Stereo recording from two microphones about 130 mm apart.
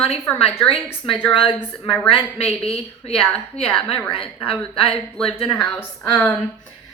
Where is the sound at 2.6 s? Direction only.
50° left (ahead or behind).